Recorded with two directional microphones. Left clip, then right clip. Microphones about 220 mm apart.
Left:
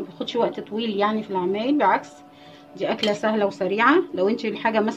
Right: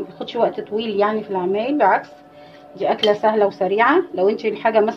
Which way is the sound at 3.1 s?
55° left (ahead or behind).